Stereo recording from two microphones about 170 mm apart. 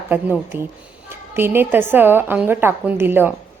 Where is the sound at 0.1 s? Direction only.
10° right (ahead or behind).